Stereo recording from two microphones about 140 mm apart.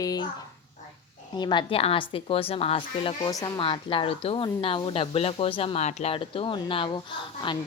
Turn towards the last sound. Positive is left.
turn(degrees=35)  # may be behind; listen again after turning